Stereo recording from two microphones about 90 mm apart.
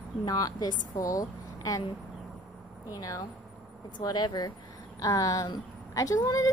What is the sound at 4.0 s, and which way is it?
Speech, 50° left (ahead or behind).